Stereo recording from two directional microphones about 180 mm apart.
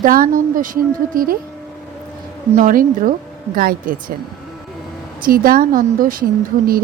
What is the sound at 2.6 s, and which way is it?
Speech, 50° right (ahead or behind).